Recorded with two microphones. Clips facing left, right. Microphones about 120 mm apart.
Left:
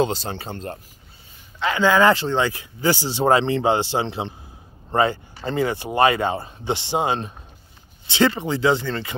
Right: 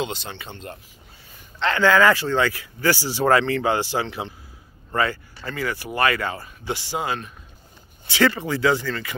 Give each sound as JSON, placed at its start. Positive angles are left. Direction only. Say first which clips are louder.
{"t": 0.0, "sound": "speech", "louder": "left 7 dB", "side_deg": 35}
{"t": 1.6, "sound": "speech", "louder": "even", "side_deg": 15}